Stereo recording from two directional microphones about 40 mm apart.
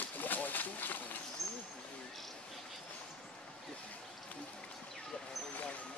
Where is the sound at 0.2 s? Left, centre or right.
Left.